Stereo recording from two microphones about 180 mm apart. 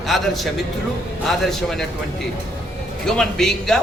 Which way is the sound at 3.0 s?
5° left (ahead or behind).